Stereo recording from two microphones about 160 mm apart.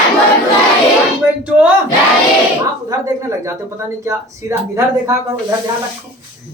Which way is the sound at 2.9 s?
20° right (ahead or behind).